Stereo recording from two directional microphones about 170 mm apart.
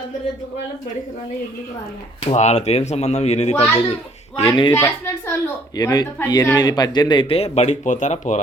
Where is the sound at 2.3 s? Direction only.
40° left (ahead or behind).